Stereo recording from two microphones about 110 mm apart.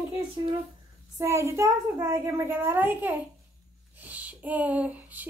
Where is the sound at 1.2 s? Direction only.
25° right (ahead or behind).